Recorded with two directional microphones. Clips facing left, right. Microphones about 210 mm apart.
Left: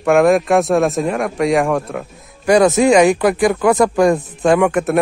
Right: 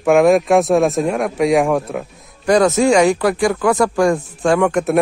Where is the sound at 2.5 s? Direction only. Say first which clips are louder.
Left 2 dB; 15° left (ahead or behind).